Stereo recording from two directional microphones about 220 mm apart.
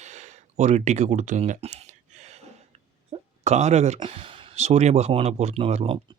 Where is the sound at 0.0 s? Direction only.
30° right (ahead or behind).